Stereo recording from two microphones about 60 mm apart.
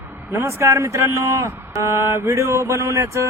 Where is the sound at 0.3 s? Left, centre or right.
Right.